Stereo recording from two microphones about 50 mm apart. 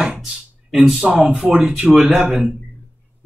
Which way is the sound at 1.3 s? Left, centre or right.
Right.